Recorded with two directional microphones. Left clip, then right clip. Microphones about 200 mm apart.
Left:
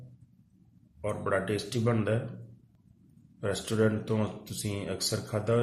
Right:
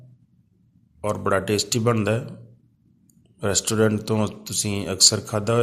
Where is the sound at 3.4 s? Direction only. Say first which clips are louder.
Right 7 dB; 50° right (ahead or behind).